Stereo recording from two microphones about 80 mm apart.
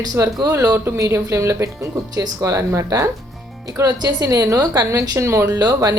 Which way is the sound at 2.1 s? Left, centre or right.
Right.